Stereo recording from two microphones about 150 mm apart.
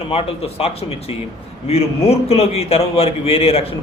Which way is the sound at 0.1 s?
40° left (ahead or behind).